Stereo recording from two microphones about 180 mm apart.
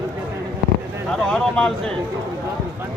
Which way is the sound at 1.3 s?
5° left (ahead or behind).